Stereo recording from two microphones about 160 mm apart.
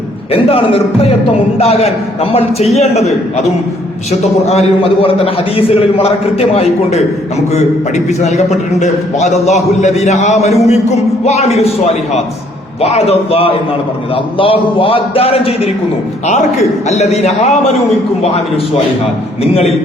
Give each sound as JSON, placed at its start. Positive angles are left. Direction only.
{"t": 0.3, "sound": "a man's voice", "side_deg": 35}
{"t": 19.4, "sound": "a man's voice", "side_deg": 40}